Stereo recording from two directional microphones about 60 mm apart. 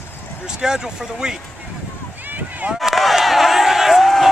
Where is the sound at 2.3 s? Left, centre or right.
Right.